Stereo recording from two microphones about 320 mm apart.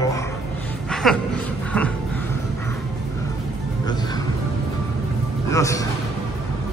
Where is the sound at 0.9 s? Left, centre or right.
Centre.